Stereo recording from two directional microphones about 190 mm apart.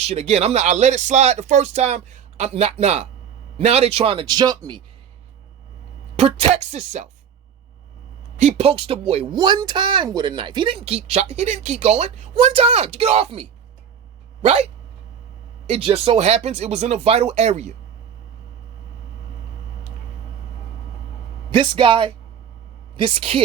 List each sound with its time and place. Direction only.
0.1 s speech: 35° right (ahead or behind)
6.1 s speech: 35° right (ahead or behind)
8.4 s speech: 35° right (ahead or behind)
21.5 s speech: 25° right (ahead or behind)